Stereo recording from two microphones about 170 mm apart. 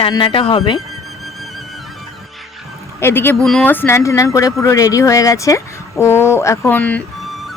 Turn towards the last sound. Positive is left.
turn(degrees=10)  # may be behind; listen again after turning